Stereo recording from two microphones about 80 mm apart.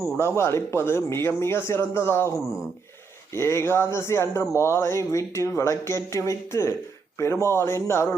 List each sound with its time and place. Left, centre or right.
0.0 s speech: left